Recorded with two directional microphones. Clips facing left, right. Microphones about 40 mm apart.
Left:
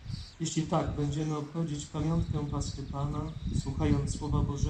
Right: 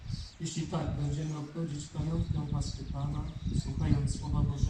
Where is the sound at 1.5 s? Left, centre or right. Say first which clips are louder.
Left 3 dB; left.